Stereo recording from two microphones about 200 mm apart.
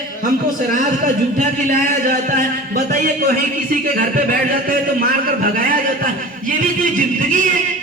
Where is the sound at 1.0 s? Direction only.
40° right (ahead or behind).